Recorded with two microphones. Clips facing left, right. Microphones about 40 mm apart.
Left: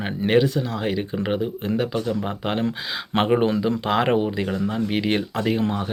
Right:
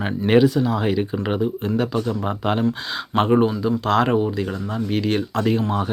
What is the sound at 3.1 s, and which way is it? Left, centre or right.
Speech, left.